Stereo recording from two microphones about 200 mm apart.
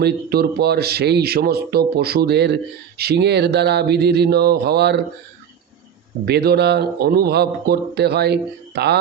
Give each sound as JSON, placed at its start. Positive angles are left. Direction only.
{"t": 0.0, "sound": "speech", "side_deg": -50}
{"t": 6.2, "sound": "speech", "side_deg": -55}